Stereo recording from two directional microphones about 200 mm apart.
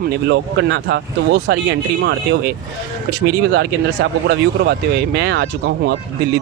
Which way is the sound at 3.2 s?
55° right (ahead or behind).